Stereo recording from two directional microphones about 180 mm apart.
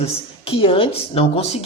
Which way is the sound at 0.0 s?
30° left (ahead or behind).